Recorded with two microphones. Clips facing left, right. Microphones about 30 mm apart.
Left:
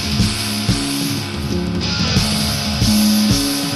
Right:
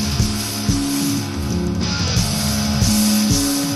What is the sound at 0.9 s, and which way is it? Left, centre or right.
Music, left.